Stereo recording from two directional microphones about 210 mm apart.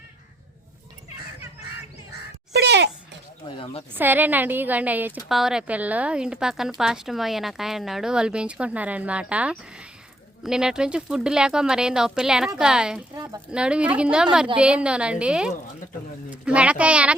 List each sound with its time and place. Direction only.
2.5 s babbling: 55° right (ahead or behind)
3.6 s speech: 25° left (ahead or behind)
3.9 s a woman's voice: 10° right (ahead or behind)